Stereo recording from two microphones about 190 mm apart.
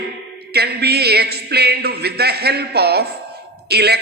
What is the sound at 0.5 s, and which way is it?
A man's voice, 55° right (ahead or behind).